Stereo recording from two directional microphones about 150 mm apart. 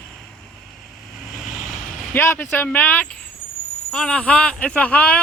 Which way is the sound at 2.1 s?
15° left (ahead or behind).